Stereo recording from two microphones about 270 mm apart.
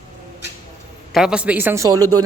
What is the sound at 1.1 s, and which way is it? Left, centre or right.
Speech, centre.